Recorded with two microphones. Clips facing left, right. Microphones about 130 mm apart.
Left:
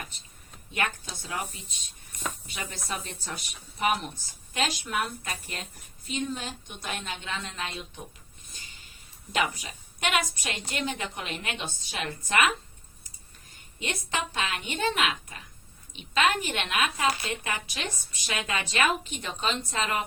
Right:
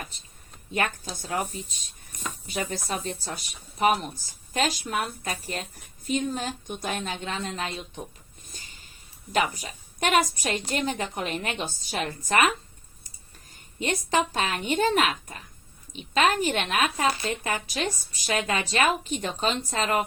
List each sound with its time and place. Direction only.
0.7 s speech: 40° right (ahead or behind)
9.3 s speech: 40° right (ahead or behind)
13.7 s speech: 40° right (ahead or behind)